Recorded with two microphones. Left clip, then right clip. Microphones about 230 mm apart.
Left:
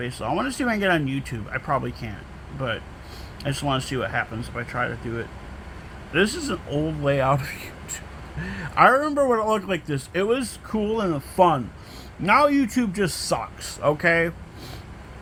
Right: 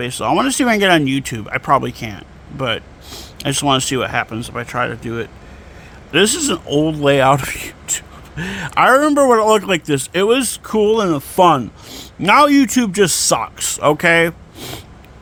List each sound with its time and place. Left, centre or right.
0.0 s speech: right